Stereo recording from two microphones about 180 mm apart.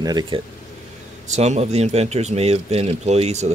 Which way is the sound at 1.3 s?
40° right (ahead or behind).